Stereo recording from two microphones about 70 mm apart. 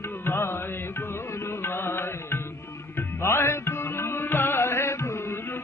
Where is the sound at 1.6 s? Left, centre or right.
Left.